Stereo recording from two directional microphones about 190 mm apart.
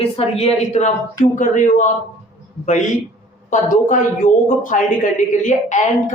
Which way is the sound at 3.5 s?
45° left (ahead or behind).